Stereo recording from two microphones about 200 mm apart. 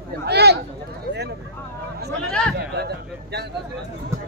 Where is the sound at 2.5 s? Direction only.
55° right (ahead or behind).